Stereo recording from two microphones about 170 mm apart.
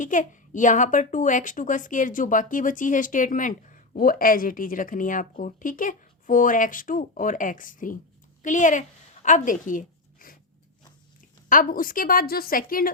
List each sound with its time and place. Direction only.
0.0 s a child's voice: 50° left (ahead or behind)
9.2 s a sound: 50° left (ahead or behind)
11.4 s a woman's voice: 55° left (ahead or behind)